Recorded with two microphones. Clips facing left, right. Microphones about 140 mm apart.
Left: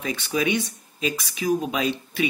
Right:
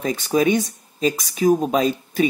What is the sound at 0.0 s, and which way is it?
Speech, 40° right (ahead or behind).